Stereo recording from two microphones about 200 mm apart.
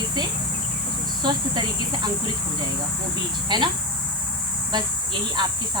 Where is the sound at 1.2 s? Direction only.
20° right (ahead or behind).